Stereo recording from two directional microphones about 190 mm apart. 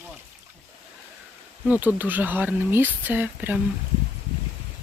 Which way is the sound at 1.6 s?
10° right (ahead or behind).